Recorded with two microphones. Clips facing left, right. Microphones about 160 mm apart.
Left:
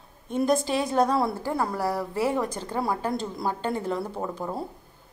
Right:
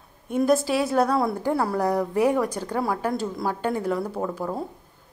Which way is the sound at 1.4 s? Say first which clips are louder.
Right 4 dB; 15° right (ahead or behind).